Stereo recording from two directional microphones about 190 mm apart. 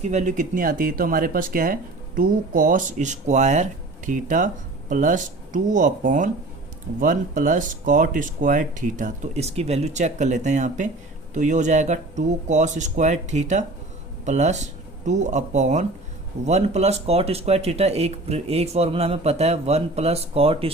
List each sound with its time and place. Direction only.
0.0 s speech: 40° right (ahead or behind)